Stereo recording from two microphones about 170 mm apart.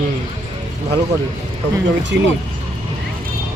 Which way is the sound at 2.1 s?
85° right.